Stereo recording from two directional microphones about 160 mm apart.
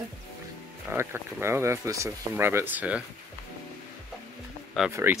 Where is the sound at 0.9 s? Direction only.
15° right (ahead or behind).